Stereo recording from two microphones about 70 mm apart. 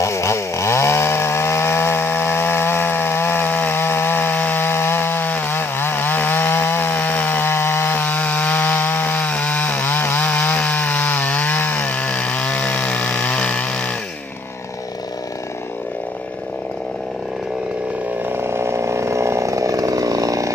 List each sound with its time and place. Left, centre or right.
0.0 s chainsaw: left; by 13.9 s centre
18.2 s chainsaw: right